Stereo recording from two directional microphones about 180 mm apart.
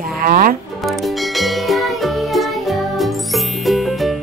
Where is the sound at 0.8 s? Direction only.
Centre (ahead or behind).